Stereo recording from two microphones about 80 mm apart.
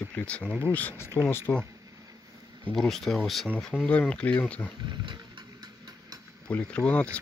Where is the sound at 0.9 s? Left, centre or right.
Left.